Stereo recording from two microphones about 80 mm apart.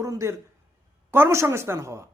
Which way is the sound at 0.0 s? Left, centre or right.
Right.